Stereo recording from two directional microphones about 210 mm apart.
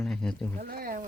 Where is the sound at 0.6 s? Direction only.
45° right (ahead or behind).